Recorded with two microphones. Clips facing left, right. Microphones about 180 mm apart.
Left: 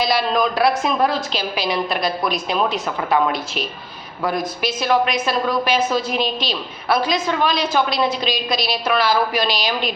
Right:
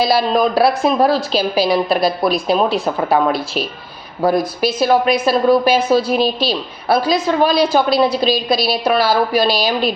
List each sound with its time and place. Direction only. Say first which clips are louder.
0.0 s speech: right 4 dB; 35° right (ahead or behind)
4.2 s speech: right 7 dB; 35° right (ahead or behind)